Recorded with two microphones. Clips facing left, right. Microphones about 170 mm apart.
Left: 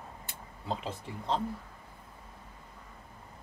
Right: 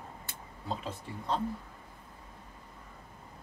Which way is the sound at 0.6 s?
25° left (ahead or behind).